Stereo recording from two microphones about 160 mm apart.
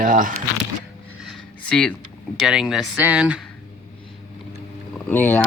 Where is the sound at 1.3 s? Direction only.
5° left (ahead or behind).